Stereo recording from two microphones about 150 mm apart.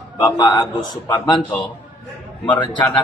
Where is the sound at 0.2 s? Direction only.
25° left (ahead or behind).